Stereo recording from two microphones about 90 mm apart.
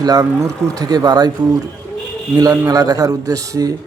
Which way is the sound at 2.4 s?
45° right (ahead or behind).